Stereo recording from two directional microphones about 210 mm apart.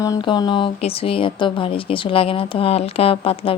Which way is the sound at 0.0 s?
20° left (ahead or behind).